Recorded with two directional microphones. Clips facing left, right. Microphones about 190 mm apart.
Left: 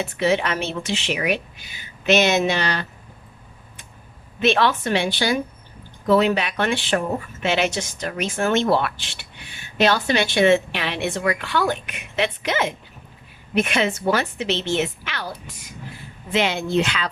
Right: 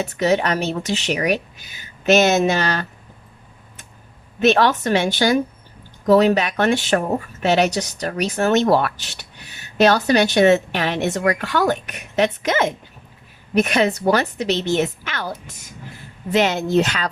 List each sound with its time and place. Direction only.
0.0 s a woman's voice: 40° right (ahead or behind)
4.4 s a woman's voice: 45° right (ahead or behind)